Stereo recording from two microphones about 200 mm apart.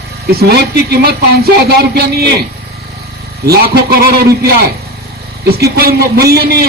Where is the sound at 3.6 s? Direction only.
50° right (ahead or behind).